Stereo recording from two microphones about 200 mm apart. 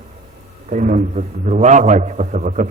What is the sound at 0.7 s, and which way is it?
A man's voice, 40° right (ahead or behind).